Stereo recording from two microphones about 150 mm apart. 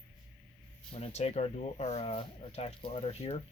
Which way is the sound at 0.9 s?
45° left (ahead or behind).